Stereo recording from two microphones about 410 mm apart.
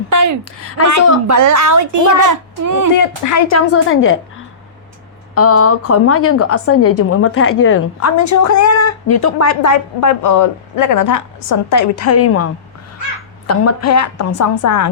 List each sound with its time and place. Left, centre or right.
0.1 s a sound: right
0.6 s a woman's voice: left
1.3 s a woman's voice: right
3.2 s a woman's voice: left
5.3 s a woman's voice: left
8.2 s a woman's voice: left
13.5 s a woman's voice: left